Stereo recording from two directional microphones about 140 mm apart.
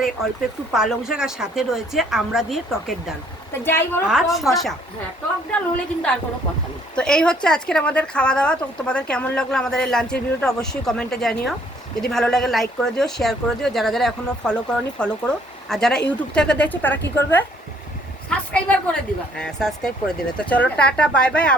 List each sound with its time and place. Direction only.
0.7 s speech: 5° right (ahead or behind)
3.6 s speech: 15° left (ahead or behind)
4.0 s a woman's voice: centre (ahead or behind)